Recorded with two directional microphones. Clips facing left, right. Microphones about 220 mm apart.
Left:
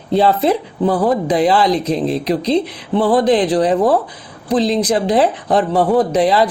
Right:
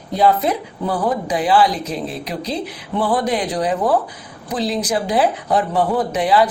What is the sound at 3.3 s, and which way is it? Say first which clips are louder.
Speech: left 6 dB; 30° left (ahead or behind).